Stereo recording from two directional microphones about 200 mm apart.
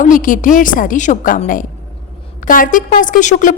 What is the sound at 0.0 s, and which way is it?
A woman's voice, 40° left (ahead or behind).